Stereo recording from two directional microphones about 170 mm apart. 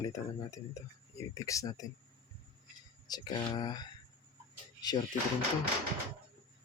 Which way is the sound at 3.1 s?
25° left (ahead or behind).